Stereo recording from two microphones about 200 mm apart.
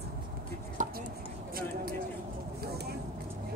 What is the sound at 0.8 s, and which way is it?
Chopping, 40° right (ahead or behind).